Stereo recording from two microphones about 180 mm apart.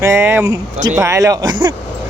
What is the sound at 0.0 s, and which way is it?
Speech, 15° right (ahead or behind).